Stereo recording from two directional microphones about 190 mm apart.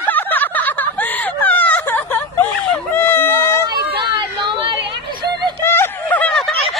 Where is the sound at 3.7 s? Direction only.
25° right (ahead or behind).